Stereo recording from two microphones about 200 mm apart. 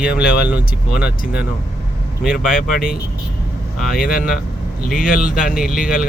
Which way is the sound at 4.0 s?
45° left (ahead or behind).